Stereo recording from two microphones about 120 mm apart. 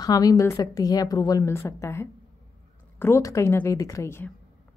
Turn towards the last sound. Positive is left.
turn(degrees=20)  # may be behind; listen again after turning